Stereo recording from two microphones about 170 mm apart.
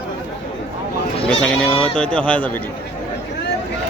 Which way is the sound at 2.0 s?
5° left (ahead or behind).